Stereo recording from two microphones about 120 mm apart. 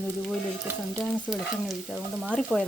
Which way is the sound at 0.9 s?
10° left (ahead or behind).